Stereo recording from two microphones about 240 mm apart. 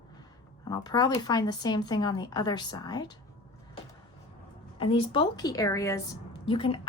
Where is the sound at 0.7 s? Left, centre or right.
Centre.